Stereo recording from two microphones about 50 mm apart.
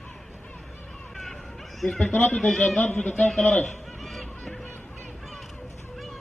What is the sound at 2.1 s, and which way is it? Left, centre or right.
A man's voice, left.